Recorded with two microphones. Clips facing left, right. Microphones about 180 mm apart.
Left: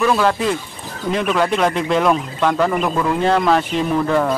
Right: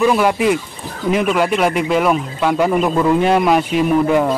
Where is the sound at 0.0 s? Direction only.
15° right (ahead or behind).